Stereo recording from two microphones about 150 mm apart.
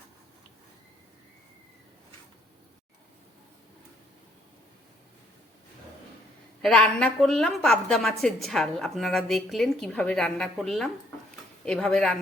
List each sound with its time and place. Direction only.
6.6 s a woman's voice: 5° left (ahead or behind)